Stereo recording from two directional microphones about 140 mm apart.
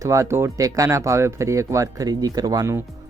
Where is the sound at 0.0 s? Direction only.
20° right (ahead or behind).